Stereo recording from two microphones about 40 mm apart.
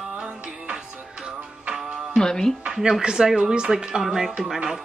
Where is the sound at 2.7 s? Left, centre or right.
Centre.